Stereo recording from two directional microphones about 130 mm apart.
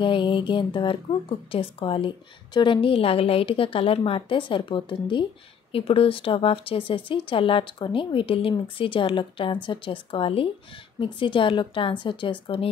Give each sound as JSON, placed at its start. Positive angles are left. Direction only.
{"t": 0.0, "sound": "a woman's voice", "side_deg": 40}